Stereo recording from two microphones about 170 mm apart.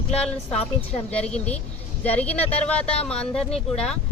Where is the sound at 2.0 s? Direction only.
10° left (ahead or behind).